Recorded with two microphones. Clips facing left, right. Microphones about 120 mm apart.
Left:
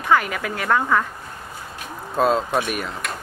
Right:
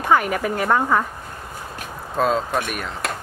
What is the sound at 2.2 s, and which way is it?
Speech, centre (ahead or behind).